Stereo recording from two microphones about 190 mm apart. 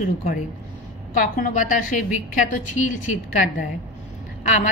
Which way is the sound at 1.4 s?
45° left (ahead or behind).